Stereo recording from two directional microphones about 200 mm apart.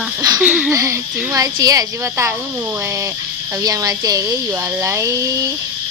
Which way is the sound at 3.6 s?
15° right (ahead or behind).